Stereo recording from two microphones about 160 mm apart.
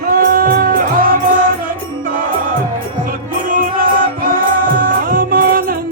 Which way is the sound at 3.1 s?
60° right (ahead or behind).